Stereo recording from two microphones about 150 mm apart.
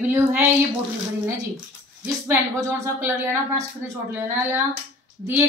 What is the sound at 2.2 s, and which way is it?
A woman's voice, 15° right (ahead or behind).